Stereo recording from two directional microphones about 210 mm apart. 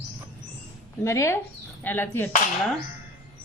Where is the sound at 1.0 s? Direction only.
15° left (ahead or behind).